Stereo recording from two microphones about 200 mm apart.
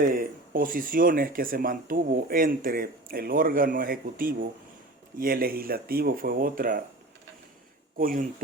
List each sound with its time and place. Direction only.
0.0 s speech: 45° right (ahead or behind)
7.9 s speech: 45° right (ahead or behind)